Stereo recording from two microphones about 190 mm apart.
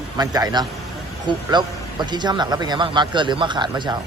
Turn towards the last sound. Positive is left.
turn(degrees=-25)  # may be behind; listen again after turning